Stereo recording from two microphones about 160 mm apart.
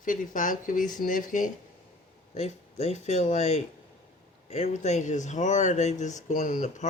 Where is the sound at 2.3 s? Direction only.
40° left (ahead or behind).